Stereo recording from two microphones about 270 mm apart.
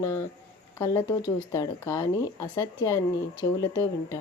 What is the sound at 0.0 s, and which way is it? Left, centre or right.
Speech, centre.